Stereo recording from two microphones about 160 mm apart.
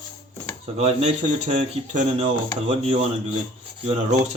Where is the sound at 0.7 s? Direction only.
40° right (ahead or behind).